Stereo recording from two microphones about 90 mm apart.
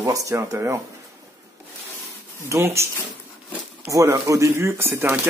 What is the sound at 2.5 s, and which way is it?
Speech, 30° right (ahead or behind).